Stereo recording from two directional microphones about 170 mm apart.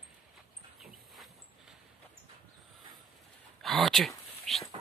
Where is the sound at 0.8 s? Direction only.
Centre (ahead or behind).